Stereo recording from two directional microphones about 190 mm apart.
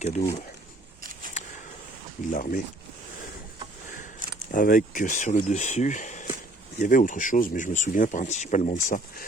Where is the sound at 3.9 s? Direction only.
45° left (ahead or behind).